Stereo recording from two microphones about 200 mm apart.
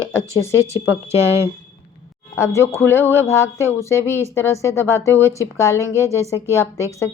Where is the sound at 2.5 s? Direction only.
15° left (ahead or behind).